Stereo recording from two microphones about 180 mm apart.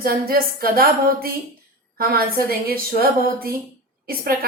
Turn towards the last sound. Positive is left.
turn(degrees=-55)  # may be behind; listen again after turning